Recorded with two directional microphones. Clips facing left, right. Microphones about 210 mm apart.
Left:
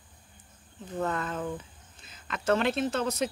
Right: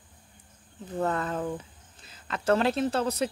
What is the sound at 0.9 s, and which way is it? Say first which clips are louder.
Speech: right 3 dB; 35° right (ahead or behind).